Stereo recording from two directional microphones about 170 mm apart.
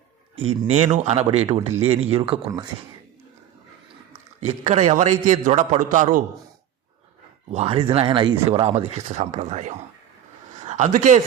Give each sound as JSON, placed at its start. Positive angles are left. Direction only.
{"t": 0.4, "sound": "speech", "side_deg": -35}
{"t": 4.4, "sound": "a man's voice", "side_deg": -40}
{"t": 7.5, "sound": "a man's voice", "side_deg": -35}